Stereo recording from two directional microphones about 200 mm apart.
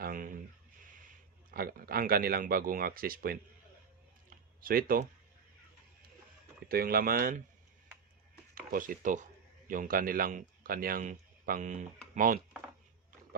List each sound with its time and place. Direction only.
0.0 s a sound: 45° right (ahead or behind)
1.5 s speech: 45° right (ahead or behind)
4.6 s speech: 45° right (ahead or behind)
6.7 s speech: 50° right (ahead or behind)
8.5 s speech: 45° right (ahead or behind)